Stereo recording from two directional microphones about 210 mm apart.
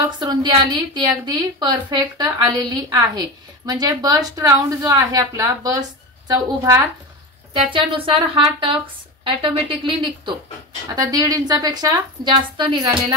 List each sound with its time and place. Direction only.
0.2 s a woman's voice: 20° right (ahead or behind)